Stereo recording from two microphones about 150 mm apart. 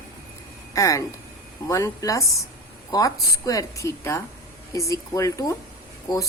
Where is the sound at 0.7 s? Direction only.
20° left (ahead or behind).